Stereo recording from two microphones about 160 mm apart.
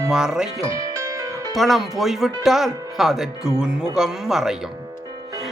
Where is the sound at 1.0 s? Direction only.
20° right (ahead or behind).